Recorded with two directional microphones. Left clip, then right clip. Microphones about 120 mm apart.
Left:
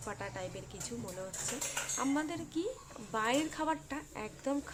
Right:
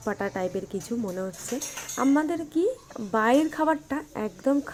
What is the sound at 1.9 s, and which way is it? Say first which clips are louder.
A woman's voice: right 13 dB; 25° right (ahead or behind).